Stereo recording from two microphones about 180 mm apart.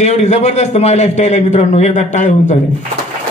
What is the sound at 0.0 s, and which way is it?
A man's voice, 40° left (ahead or behind).